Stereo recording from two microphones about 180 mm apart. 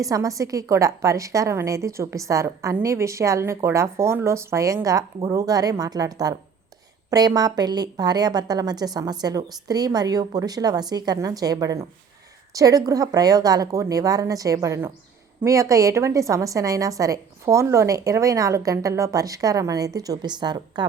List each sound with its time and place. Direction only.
0.0 s a woman's voice: 20° right (ahead or behind)